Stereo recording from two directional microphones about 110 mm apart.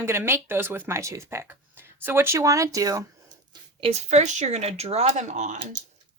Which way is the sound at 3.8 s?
80° right.